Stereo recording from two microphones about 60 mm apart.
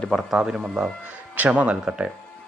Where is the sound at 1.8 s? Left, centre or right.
Centre.